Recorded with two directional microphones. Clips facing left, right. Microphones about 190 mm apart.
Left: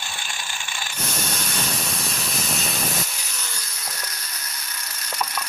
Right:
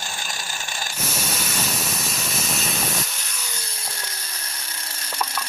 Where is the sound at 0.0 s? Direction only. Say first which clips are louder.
Right 2 dB; 40° right (ahead or behind).